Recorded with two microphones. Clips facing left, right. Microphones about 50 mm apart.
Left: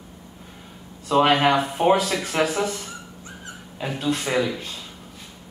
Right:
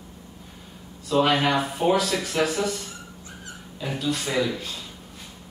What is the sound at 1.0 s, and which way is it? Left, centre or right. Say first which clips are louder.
Speech: left 3 dB; left.